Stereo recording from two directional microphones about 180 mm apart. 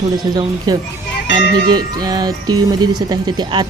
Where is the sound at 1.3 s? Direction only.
25° right (ahead or behind).